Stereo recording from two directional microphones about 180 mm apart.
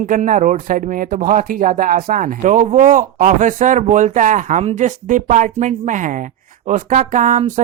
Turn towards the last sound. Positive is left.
turn(degrees=-45)  # may be behind; listen again after turning